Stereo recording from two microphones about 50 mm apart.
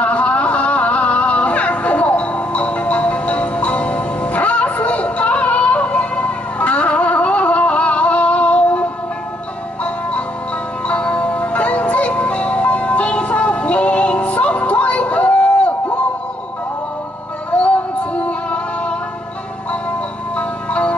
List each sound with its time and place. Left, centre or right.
0.0 s a sound: left
10.9 s music: left
17.5 s music: left
20.3 s music: left